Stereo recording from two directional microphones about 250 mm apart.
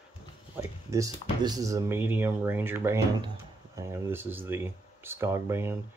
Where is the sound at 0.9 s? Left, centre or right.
Centre.